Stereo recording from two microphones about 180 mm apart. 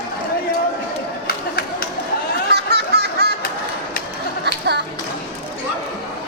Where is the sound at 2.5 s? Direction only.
65° right (ahead or behind).